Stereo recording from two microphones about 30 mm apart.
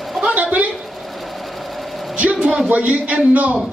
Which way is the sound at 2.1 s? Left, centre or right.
Right.